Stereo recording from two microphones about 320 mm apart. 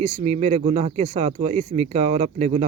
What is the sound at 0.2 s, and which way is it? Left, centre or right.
Speech, centre.